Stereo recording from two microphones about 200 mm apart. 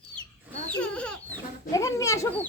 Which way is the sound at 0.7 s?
5° left (ahead or behind).